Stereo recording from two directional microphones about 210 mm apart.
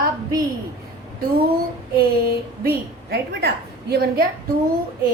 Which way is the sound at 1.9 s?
45° right (ahead or behind).